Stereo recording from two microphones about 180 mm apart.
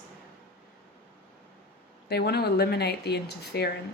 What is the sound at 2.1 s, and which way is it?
A woman's voice, 65° left (ahead or behind).